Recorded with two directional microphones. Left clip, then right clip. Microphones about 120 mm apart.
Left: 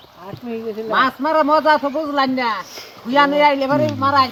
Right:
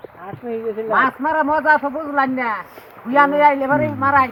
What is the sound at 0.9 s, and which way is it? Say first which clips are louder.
A man's voice: left 1 dB; 25° right (ahead or behind).